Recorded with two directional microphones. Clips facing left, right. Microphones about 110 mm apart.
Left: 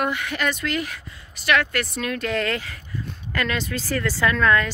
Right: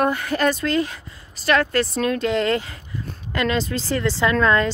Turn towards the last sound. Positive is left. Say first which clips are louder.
# right 2 dB
turn(degrees=-30)  # may be behind; listen again after turning